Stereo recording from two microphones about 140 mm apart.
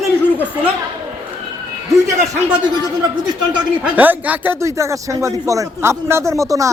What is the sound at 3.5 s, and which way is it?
Speech, 10° right (ahead or behind).